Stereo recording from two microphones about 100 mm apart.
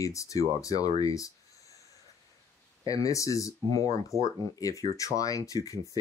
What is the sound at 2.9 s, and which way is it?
Speech, 35° left (ahead or behind).